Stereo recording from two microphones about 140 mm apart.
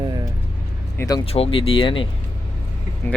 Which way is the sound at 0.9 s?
25° left (ahead or behind).